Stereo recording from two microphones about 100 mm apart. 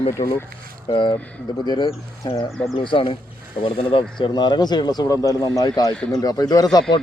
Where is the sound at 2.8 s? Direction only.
55° left (ahead or behind).